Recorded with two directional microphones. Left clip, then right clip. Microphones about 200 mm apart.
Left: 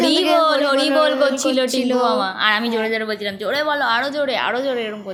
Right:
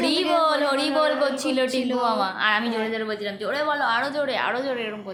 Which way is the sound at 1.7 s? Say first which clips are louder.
Left 6 dB; 35° left (ahead or behind).